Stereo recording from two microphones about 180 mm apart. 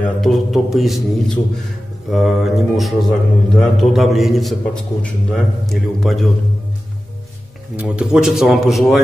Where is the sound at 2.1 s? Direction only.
Centre (ahead or behind).